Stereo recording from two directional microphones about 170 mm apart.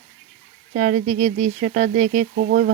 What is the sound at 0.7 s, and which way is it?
Speech, 50° right (ahead or behind).